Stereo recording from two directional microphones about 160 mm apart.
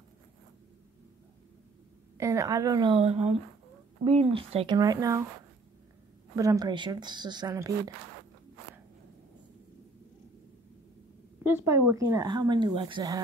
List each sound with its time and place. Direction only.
2.1 s speech: 20° right (ahead or behind)
3.0 s speech: 40° right (ahead or behind)
4.7 s speech: 20° right (ahead or behind)
6.3 s speech: 20° right (ahead or behind)
11.4 s speech: 15° right (ahead or behind)